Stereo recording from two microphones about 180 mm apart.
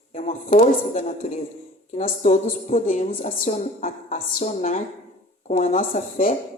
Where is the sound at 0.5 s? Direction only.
40° left (ahead or behind).